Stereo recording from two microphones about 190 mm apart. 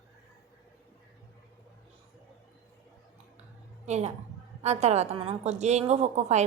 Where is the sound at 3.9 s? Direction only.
35° right (ahead or behind).